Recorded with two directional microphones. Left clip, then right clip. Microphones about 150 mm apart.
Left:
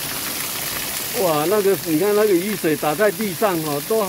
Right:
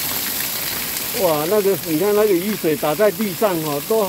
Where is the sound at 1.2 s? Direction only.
10° left (ahead or behind).